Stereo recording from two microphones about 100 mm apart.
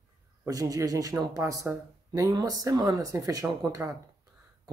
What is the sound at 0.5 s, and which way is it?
Speech, 35° right (ahead or behind).